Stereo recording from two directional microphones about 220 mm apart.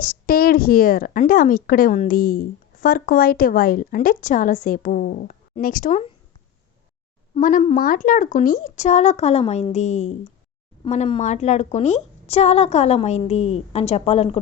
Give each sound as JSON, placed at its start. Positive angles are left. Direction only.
{"t": 0.0, "sound": "a woman's voice", "side_deg": 40}
{"t": 7.3, "sound": "a woman's voice", "side_deg": 35}